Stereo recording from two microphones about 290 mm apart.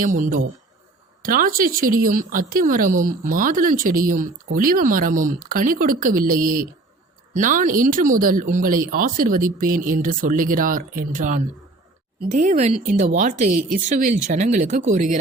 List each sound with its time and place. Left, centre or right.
0.0 s speech: right